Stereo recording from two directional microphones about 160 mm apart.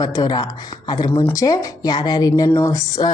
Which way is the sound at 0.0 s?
25° left (ahead or behind).